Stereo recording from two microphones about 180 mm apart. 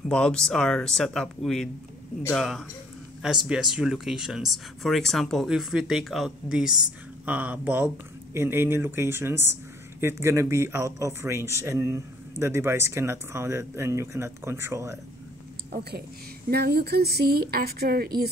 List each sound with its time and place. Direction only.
0.1 s speech: 5° left (ahead or behind); by 15.0 s 15° right (ahead or behind)
15.7 s a woman's voice: 65° right (ahead or behind)